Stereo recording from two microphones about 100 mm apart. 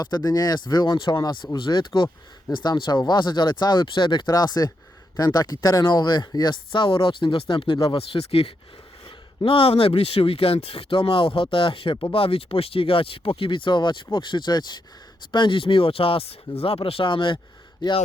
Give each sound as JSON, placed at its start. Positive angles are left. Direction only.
{"t": 0.0, "sound": "speech", "side_deg": 40}
{"t": 9.0, "sound": "speech", "side_deg": 60}